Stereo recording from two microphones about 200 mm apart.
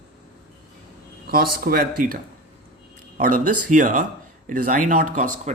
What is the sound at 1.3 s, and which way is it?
A man's voice, 50° right (ahead or behind).